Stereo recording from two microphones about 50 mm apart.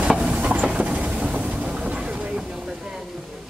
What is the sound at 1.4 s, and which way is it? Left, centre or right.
Vehicle, right.